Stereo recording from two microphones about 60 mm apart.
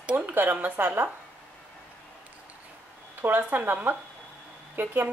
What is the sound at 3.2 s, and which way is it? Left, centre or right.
Speech, right.